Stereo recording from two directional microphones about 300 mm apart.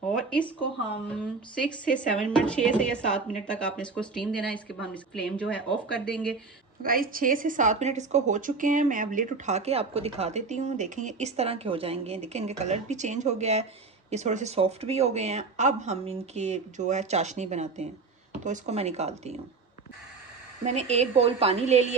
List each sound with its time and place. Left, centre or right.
0.1 s speech: centre
1.5 s a woman's voice: centre
6.8 s speech: right
20.7 s speech: right